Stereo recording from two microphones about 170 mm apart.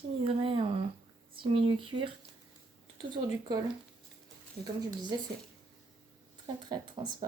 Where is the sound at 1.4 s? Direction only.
30° right (ahead or behind).